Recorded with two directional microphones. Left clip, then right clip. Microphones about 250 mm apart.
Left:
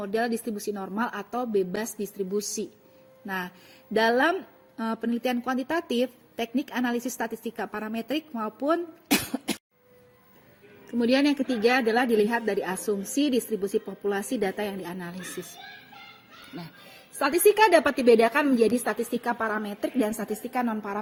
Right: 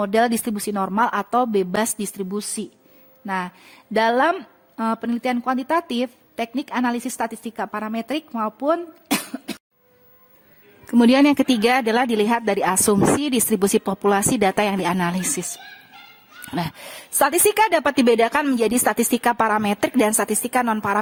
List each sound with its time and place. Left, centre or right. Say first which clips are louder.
0.0 s a woman's voice: right 9 dB; right; by 9.6 s centre
10.8 s a woman's voice: right 8 dB; right
17.2 s a woman's voice: right 3 dB; right